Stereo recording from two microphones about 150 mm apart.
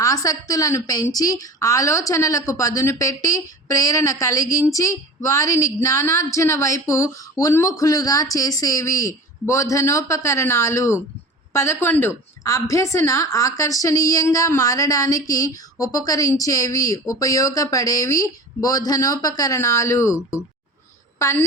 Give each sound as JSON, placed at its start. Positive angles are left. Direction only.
{"t": 0.0, "sound": "a woman's voice", "side_deg": 25}